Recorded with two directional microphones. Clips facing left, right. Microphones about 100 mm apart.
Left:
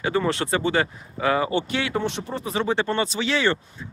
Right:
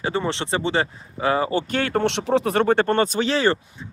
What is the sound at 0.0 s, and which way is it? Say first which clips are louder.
Speech: left 1 dB; 25° right (ahead or behind).